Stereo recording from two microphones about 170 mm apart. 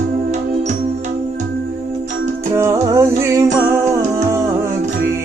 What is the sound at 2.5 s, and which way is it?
Music, 20° right (ahead or behind).